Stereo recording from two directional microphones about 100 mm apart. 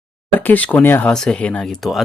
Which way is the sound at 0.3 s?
15° left (ahead or behind).